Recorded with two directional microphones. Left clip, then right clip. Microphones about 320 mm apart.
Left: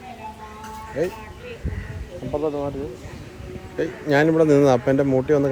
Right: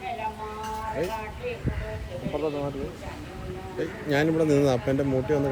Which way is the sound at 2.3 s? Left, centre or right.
Left.